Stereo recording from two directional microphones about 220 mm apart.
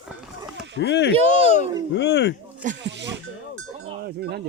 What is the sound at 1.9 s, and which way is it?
Speech, 50° left (ahead or behind).